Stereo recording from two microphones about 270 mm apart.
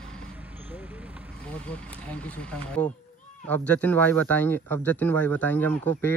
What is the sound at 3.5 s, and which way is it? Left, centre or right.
Speech, centre.